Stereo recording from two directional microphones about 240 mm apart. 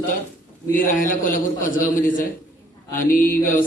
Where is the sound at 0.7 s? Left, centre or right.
Left.